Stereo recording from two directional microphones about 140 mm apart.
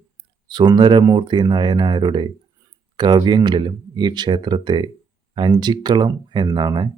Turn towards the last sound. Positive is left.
turn(degrees=-30)  # may be behind; listen again after turning